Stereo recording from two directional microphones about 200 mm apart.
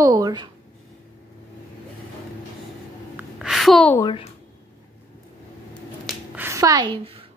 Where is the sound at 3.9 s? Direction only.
20° left (ahead or behind).